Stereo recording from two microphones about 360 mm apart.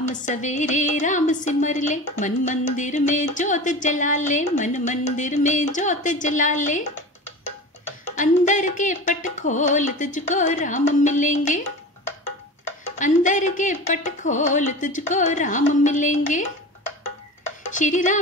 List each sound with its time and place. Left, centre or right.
0.0 s music: centre
8.2 s music: left
13.0 s music: left
17.4 s stir: left